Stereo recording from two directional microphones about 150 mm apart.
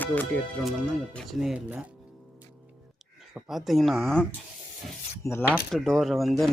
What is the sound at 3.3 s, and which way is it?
Speech, centre (ahead or behind).